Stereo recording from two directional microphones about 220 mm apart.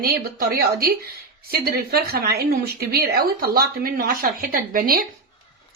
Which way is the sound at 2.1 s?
45° right (ahead or behind).